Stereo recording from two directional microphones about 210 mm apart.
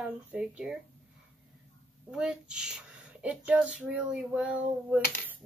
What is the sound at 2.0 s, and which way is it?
Speech, 5° right (ahead or behind).